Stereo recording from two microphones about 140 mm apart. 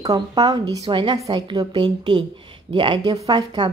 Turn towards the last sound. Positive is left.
turn(degrees=-30)  # may be behind; listen again after turning